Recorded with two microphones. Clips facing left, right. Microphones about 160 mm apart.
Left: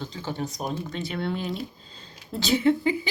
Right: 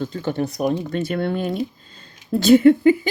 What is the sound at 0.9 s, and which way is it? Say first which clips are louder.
Speech: right 7 dB; 50° right (ahead or behind).